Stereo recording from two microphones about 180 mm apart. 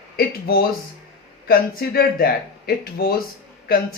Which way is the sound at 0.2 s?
60° left (ahead or behind).